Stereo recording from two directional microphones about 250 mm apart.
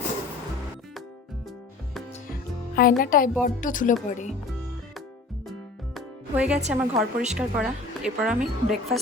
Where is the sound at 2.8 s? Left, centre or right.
Left.